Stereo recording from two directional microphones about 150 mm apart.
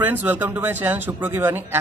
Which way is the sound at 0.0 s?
10° right (ahead or behind).